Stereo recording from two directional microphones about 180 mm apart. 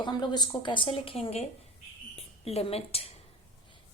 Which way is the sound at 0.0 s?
25° left (ahead or behind).